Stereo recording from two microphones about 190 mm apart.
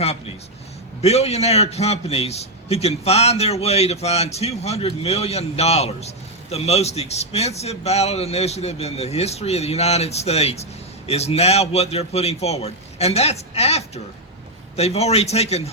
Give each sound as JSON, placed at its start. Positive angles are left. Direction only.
{"t": 0.0, "sound": "a man's voice", "side_deg": 30}